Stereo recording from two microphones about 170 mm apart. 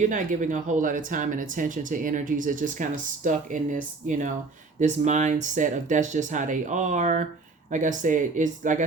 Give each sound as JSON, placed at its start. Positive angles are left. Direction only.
{"t": 0.0, "sound": "speech", "side_deg": -50}